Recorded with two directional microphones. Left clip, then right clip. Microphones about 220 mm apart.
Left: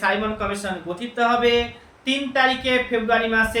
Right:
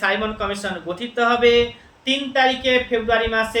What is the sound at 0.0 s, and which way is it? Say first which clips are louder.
Speech: right 1 dB; 5° right (ahead or behind).